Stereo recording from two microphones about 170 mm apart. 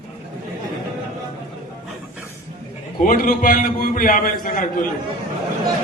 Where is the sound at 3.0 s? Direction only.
55° left (ahead or behind).